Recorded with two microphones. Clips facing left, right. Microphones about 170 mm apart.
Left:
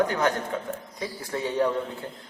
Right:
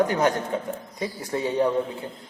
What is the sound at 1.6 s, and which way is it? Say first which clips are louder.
Speech: right 1 dB; 25° right (ahead or behind).